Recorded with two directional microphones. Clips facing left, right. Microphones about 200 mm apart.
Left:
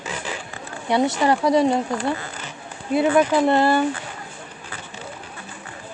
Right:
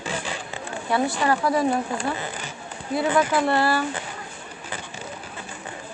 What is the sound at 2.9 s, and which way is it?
Speech, 20° left (ahead or behind).